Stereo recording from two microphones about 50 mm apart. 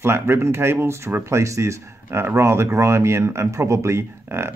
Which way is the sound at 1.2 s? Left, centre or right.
Right.